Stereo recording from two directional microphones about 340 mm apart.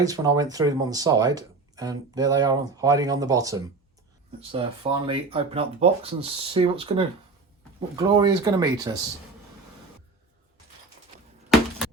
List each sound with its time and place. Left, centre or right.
0.0 s speech: centre